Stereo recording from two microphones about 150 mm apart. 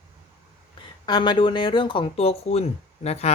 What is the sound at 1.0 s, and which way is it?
Speech, 30° left (ahead or behind).